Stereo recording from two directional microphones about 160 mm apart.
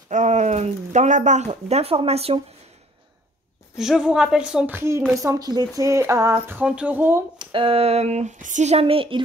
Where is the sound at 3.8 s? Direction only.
5° right (ahead or behind).